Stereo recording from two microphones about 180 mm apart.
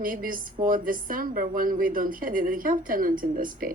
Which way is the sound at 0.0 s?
50° right (ahead or behind).